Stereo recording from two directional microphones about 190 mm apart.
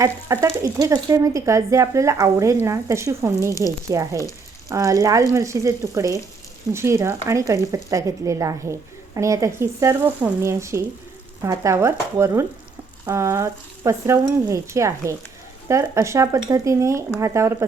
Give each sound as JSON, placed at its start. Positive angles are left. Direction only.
{"t": 0.3, "sound": "speech", "side_deg": -15}